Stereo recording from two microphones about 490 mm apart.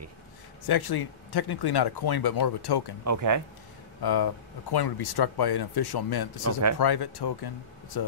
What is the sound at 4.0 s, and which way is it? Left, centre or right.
Speech, left.